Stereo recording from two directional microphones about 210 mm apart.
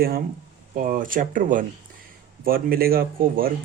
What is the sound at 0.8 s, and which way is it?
Speech, 40° right (ahead or behind).